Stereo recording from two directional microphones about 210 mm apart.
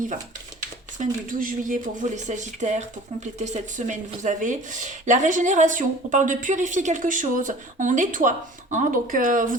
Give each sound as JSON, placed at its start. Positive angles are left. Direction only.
{"t": 0.9, "sound": "speech", "side_deg": -40}